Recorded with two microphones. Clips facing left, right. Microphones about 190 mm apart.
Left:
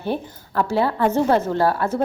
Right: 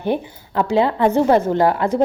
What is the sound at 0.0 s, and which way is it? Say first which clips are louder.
A woman's voice: right 4 dB; 15° right (ahead or behind).